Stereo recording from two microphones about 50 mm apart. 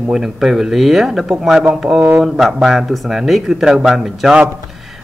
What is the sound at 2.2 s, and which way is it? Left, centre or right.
Speech, centre.